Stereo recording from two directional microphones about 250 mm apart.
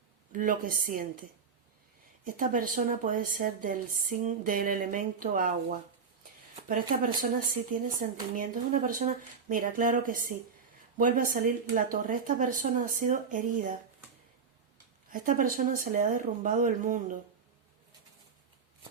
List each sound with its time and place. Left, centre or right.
0.3 s a woman's voice: right
2.2 s a woman's voice: right
6.7 s a woman's voice: right
15.1 s a woman's voice: right